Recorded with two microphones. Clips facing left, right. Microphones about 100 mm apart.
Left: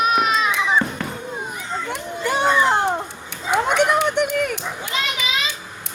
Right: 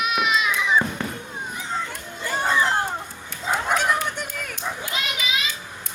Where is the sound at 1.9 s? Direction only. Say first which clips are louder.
Left 6 dB; 75° left (ahead or behind).